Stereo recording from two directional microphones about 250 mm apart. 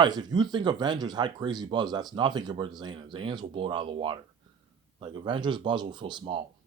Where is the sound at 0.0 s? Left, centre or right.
Centre.